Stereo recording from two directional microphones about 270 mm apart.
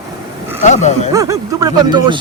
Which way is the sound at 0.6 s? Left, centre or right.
Left.